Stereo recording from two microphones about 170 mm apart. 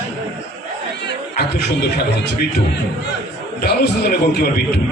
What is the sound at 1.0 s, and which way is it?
A man's voice, 75° left (ahead or behind).